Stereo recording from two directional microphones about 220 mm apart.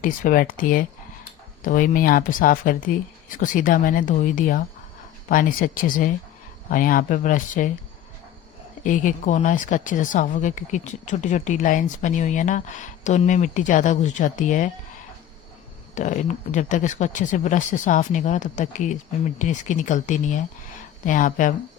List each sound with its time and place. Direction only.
0.0 s speech: 40° left (ahead or behind)
8.8 s speech: 35° left (ahead or behind)
16.0 s speech: 35° left (ahead or behind)